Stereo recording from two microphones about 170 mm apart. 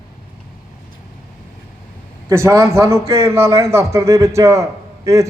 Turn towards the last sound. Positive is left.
turn(degrees=-15)  # may be behind; listen again after turning